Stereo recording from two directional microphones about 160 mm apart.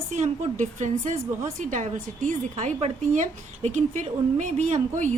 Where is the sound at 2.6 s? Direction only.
40° right (ahead or behind).